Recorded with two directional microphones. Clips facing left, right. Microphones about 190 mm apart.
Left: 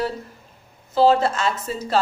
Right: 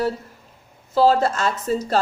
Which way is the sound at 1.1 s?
40° right (ahead or behind).